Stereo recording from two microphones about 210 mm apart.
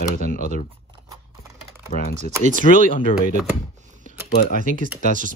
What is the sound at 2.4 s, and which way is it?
Speech, 35° right (ahead or behind).